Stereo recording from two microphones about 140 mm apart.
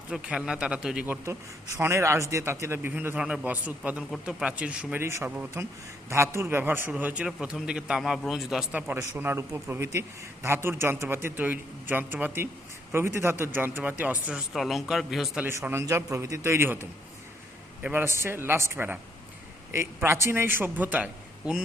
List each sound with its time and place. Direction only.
0.1 s a man's voice: 5° right (ahead or behind)
1.2 s a man's voice: 20° right (ahead or behind); by 8.8 s centre (ahead or behind)
8.9 s a man's voice: 15° right (ahead or behind)
15.4 s a man's voice: 15° right (ahead or behind)
17.8 s a man's voice: 15° right (ahead or behind)